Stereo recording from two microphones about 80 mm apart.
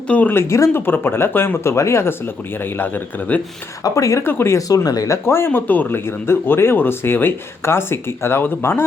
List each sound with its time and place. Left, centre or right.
0.1 s speech: left
3.8 s speech: left
4.2 s speech: left
4.7 s speech: left